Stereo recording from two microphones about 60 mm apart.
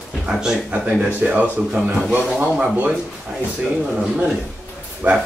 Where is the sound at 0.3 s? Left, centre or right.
Centre.